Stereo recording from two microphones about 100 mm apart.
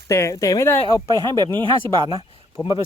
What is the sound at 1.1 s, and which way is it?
Speech, 45° right (ahead or behind).